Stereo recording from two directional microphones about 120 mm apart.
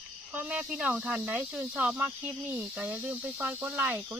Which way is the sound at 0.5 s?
5° right (ahead or behind).